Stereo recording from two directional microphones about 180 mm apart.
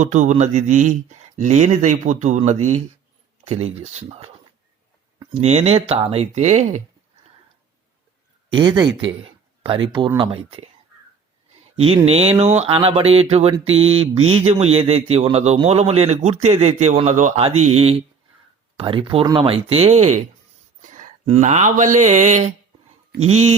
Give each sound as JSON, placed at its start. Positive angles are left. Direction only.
{"t": 0.0, "sound": "mantra", "side_deg": -40}
{"t": 5.3, "sound": "mantra", "side_deg": -35}
{"t": 8.4, "sound": "speech", "side_deg": -25}
{"t": 10.2, "sound": "mantra", "side_deg": -30}
{"t": 11.8, "sound": "mantra", "side_deg": -35}
{"t": 20.8, "sound": "speech", "side_deg": -45}
{"t": 23.2, "sound": "mantra", "side_deg": -35}